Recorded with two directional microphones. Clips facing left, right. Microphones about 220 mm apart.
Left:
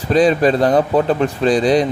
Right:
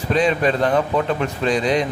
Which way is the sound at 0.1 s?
35° left (ahead or behind).